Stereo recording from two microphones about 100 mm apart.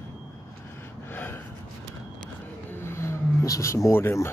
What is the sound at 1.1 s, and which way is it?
Gasp, 20° left (ahead or behind).